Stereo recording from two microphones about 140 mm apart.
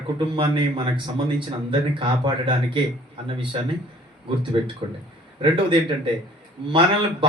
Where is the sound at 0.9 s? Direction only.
35° right (ahead or behind).